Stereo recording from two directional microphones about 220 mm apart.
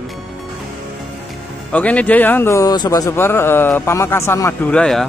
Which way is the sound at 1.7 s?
5° left (ahead or behind).